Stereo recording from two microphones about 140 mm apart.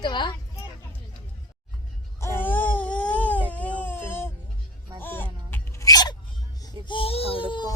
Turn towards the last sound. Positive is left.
turn(degrees=35)  # may be behind; listen again after turning